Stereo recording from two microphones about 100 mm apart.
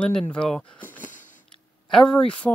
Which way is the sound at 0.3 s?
10° left (ahead or behind).